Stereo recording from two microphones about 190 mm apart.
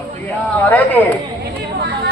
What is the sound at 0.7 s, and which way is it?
Speech, 10° left (ahead or behind).